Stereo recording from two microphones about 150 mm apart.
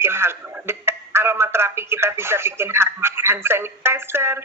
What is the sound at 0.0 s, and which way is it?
Speech, 15° right (ahead or behind).